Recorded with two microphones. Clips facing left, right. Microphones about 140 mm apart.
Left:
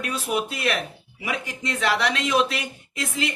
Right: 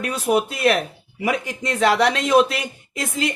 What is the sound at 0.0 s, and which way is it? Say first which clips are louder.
A man's voice: right 6 dB; 45° right (ahead or behind).